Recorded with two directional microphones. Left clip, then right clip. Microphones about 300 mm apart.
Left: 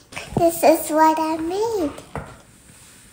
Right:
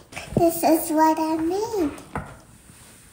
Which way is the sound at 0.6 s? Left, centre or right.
Centre.